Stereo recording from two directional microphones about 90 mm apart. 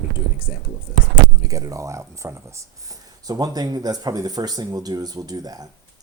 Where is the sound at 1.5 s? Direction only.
40° right (ahead or behind).